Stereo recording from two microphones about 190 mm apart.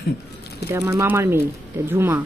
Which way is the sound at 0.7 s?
15° right (ahead or behind).